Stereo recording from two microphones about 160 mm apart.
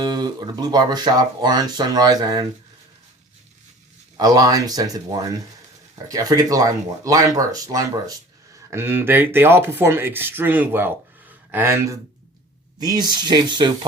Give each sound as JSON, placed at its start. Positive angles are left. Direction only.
{"t": 0.0, "sound": "speech", "side_deg": -25}
{"t": 4.2, "sound": "speech", "side_deg": -25}